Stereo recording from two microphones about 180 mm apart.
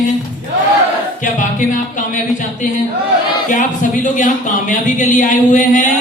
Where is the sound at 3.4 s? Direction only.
45° left (ahead or behind).